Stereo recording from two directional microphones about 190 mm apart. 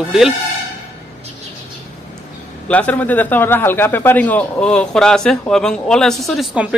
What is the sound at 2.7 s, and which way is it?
A man's voice, 10° left (ahead or behind).